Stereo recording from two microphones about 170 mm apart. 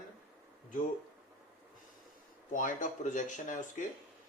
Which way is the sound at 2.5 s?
50° left (ahead or behind).